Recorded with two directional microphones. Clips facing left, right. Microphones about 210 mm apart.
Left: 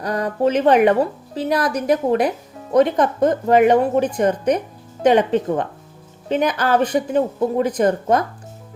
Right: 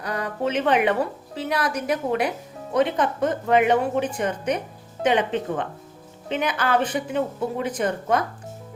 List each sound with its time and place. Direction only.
0.0 s a woman's voice: 40° left (ahead or behind)